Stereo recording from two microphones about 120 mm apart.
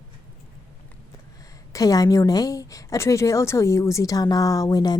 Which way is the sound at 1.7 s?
30° left (ahead or behind).